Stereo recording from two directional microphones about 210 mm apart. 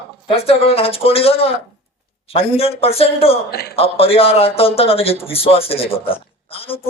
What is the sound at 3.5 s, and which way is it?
Speech, 50° left (ahead or behind).